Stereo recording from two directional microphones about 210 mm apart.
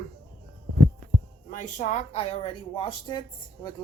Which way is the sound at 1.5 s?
35° left (ahead or behind).